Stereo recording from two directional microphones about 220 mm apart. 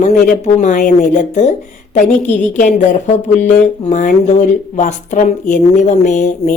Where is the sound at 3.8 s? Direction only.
35° left (ahead or behind).